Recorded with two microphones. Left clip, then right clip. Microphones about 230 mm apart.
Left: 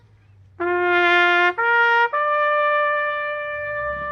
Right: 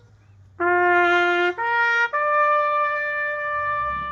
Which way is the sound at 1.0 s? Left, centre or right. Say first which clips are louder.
Left 3 dB; left.